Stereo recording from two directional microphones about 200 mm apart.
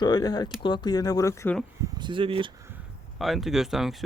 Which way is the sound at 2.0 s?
25° right (ahead or behind).